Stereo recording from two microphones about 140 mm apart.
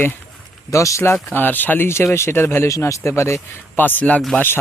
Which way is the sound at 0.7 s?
20° left (ahead or behind).